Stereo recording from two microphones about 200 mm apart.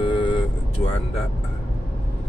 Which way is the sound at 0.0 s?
25° left (ahead or behind).